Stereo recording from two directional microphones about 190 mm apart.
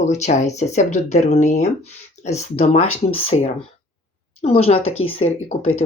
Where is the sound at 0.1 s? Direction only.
35° left (ahead or behind).